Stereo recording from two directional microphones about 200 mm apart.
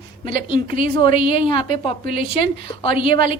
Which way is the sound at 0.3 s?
25° left (ahead or behind).